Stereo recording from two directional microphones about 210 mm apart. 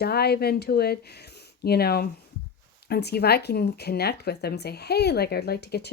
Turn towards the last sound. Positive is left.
turn(degrees=50)  # may be behind; listen again after turning